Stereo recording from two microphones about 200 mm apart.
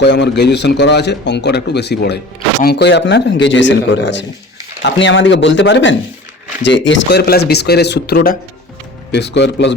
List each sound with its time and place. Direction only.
0.0 s a man's voice: 60° left (ahead or behind)